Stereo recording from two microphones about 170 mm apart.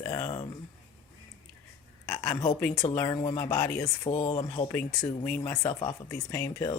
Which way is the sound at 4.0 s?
40° left (ahead or behind).